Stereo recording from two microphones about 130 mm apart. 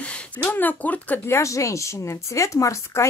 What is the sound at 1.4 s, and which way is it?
Speech, 25° left (ahead or behind).